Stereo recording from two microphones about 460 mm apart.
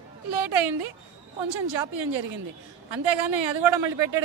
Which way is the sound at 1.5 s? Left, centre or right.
Right.